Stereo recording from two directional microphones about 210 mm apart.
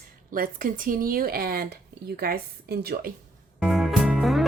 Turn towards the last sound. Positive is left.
turn(degrees=0)  # may be behind; listen again after turning